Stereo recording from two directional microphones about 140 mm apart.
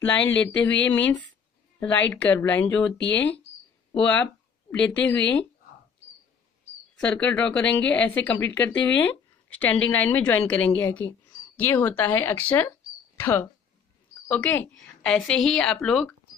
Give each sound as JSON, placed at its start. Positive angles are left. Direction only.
{"t": 0.0, "sound": "a woman's voice", "side_deg": 10}
{"t": 3.9, "sound": "a woman's voice", "side_deg": 10}
{"t": 7.0, "sound": "a woman's voice", "side_deg": 10}